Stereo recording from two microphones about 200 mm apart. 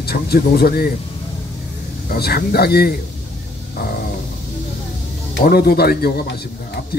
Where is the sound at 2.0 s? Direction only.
50° left (ahead or behind).